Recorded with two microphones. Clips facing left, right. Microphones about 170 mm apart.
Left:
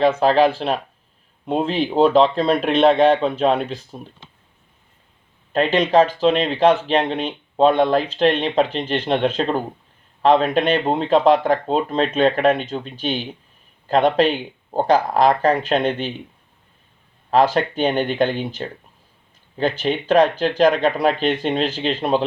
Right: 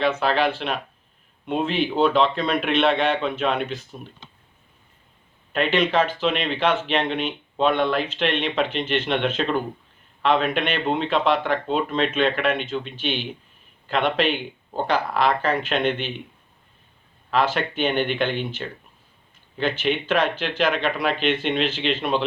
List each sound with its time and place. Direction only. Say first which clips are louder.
0.0 s speech: left 6 dB; 40° left (ahead or behind)
5.5 s speech: left 5 dB; 35° left (ahead or behind)
17.3 s speech: left 6 dB; 35° left (ahead or behind)